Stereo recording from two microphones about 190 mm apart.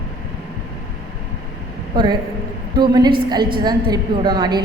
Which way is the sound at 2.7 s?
20° right (ahead or behind).